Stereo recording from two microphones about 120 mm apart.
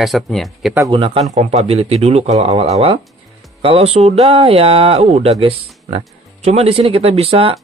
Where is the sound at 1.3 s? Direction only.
60° right (ahead or behind).